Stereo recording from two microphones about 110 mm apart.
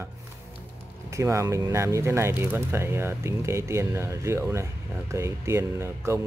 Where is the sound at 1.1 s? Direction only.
25° right (ahead or behind).